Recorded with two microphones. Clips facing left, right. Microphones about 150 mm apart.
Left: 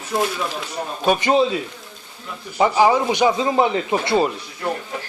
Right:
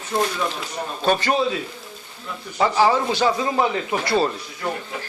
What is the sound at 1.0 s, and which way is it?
Speech, 15° left (ahead or behind).